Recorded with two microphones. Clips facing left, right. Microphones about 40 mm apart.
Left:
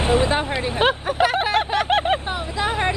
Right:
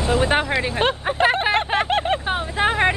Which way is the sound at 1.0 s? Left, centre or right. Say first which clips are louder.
Right 1 dB; right.